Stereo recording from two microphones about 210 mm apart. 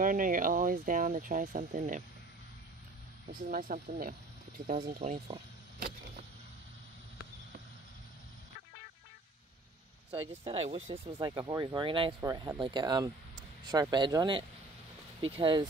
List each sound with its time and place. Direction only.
0.0 s speech: 40° right (ahead or behind)
3.4 s speech: 40° right (ahead or behind)
10.4 s speech: 30° right (ahead or behind)